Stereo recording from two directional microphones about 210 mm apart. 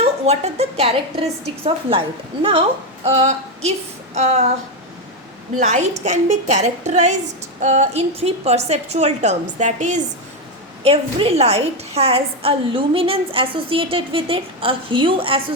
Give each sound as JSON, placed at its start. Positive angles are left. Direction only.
{"t": 0.0, "sound": "a woman's voice", "side_deg": -30}
{"t": 5.5, "sound": "a woman's voice", "side_deg": -35}